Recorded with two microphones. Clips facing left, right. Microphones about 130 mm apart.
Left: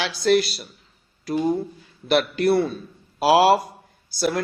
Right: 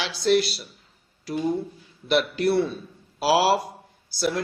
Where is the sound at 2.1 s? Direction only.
55° left (ahead or behind).